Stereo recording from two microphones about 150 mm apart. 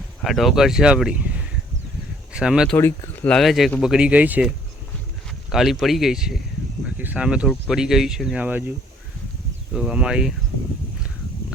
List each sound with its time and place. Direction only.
0.2 s speech: centre (ahead or behind)
2.3 s speech: 5° right (ahead or behind)
2.7 s speech: 15° left (ahead or behind)
3.2 s speech: centre (ahead or behind)
9.7 s speech: 5° right (ahead or behind)